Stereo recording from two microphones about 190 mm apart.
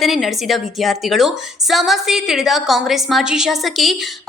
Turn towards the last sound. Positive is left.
turn(degrees=0)  # may be behind; listen again after turning